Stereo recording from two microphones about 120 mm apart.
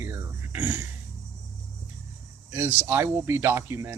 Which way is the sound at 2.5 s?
20° right (ahead or behind).